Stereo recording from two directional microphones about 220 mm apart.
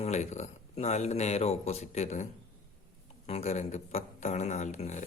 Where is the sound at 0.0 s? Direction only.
30° left (ahead or behind).